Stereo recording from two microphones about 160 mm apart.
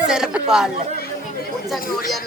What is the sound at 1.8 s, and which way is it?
Speech, 65° left (ahead or behind).